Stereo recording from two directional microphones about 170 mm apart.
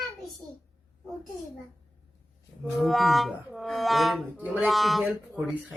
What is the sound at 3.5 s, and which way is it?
Music, centre (ahead or behind).